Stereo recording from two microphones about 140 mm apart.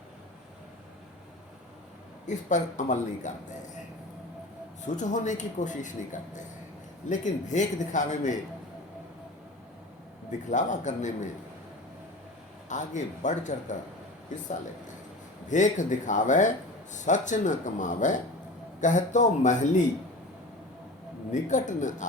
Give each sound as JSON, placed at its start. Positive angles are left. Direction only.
{"t": 2.2, "sound": "a man's voice", "side_deg": 60}
{"t": 4.9, "sound": "a man's voice", "side_deg": 60}
{"t": 10.5, "sound": "a man's voice", "side_deg": 60}
{"t": 12.6, "sound": "a man's voice", "side_deg": 60}
{"t": 15.4, "sound": "a man's voice", "side_deg": 60}
{"t": 21.3, "sound": "a man's voice", "side_deg": 60}